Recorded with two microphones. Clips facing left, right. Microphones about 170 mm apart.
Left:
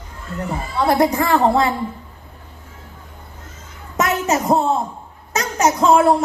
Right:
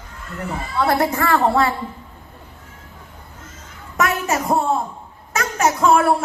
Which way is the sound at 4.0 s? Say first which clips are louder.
Left 2 dB; 20° left (ahead or behind).